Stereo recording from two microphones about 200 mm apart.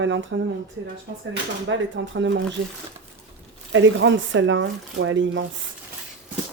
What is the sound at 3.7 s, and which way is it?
Speech, 70° right (ahead or behind).